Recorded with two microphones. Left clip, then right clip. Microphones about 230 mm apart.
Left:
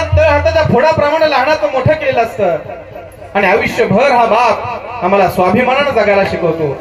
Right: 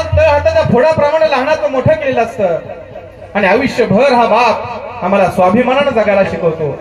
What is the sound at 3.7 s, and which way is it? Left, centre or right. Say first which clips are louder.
Speech: even; left.